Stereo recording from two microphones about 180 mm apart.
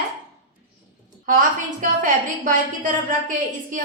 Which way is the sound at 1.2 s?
45° right (ahead or behind).